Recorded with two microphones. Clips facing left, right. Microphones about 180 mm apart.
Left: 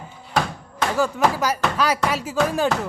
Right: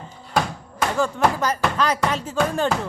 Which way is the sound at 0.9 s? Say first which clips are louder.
Left 1 dB; 5° left (ahead or behind).